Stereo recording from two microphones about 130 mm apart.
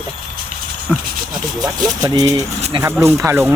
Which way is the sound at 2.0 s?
30° right (ahead or behind).